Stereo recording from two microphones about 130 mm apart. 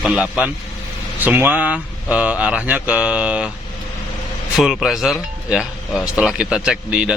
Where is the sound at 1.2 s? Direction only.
15° right (ahead or behind).